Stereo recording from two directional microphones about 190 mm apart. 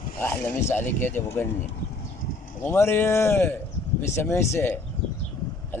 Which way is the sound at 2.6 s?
15° left (ahead or behind).